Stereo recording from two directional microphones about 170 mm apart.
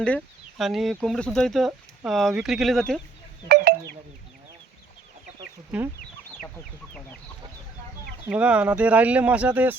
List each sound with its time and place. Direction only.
0.6 s speech: centre (ahead or behind)
3.5 s a sound: 70° right (ahead or behind)
5.7 s speech: 10° right (ahead or behind)
8.3 s speech: 5° right (ahead or behind)